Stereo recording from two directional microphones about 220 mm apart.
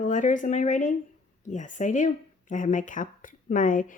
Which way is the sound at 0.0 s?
35° left (ahead or behind).